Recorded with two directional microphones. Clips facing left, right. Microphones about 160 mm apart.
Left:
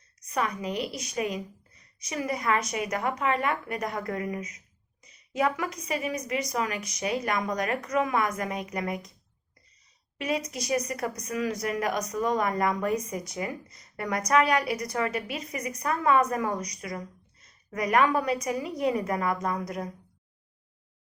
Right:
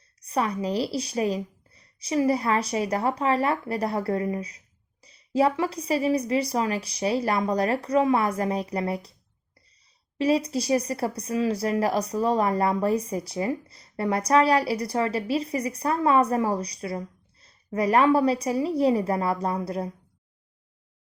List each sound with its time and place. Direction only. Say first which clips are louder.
0.2 s a woman's voice: right 4 dB; 30° right (ahead or behind)
10.2 s a woman's voice: right 7 dB; 30° right (ahead or behind)